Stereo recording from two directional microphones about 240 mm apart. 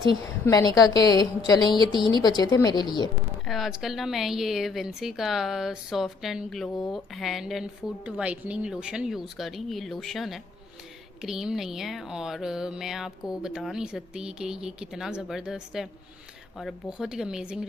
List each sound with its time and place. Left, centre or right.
0.4 s a woman's voice: centre
3.4 s speech: centre